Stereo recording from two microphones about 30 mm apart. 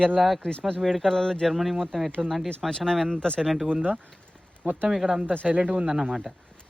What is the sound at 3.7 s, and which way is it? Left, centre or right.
Speech, right.